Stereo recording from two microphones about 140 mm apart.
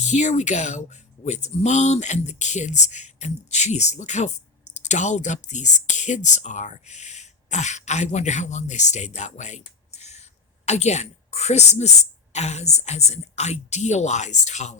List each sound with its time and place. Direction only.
0.0 s a woman's voice: 55° left (ahead or behind)